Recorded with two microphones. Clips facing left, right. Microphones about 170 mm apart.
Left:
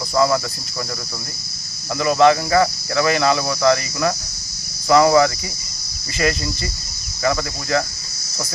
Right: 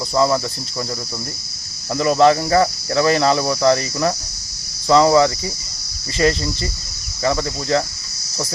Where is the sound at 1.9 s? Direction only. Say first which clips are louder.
Right 1 dB; 35° right (ahead or behind).